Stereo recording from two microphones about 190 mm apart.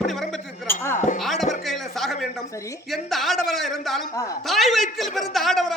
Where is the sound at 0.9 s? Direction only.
40° left (ahead or behind).